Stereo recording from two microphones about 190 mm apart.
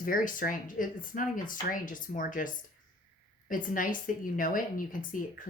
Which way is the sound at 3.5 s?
45° left (ahead or behind).